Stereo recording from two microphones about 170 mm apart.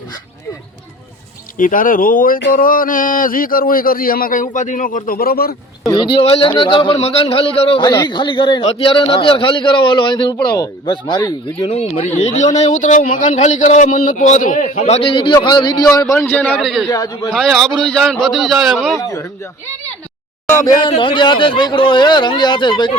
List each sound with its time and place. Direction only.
1.5 s speech: 55° left (ahead or behind)
5.8 s a man's voice: 25° left (ahead or behind)
11.7 s a man's voice: 40° left (ahead or behind); by 16.8 s centre (ahead or behind)
16.9 s a man's voice: 20° left (ahead or behind)
17.3 s a man's voice: centre (ahead or behind)
18.9 s a man's voice: 20° left (ahead or behind)